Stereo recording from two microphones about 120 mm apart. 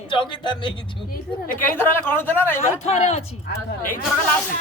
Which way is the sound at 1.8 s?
20° left (ahead or behind).